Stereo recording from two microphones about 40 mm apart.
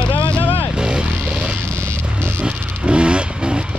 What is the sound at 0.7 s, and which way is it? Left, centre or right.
Music, right.